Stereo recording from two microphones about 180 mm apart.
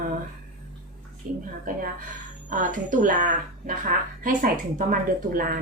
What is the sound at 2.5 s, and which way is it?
A woman's voice, 45° right (ahead or behind).